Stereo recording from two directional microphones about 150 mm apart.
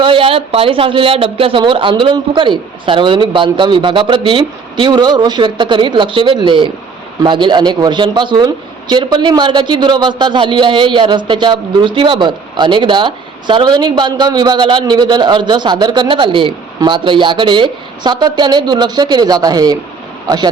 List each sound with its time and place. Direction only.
0.0 s a man's voice: 35° right (ahead or behind)